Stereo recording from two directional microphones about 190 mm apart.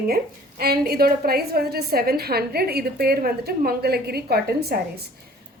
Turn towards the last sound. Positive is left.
turn(degrees=-55)  # may be behind; listen again after turning